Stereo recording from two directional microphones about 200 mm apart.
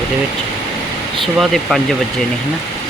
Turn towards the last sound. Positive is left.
turn(degrees=0)  # may be behind; listen again after turning